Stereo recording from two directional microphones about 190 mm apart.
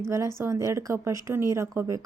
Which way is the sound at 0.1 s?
15° right (ahead or behind).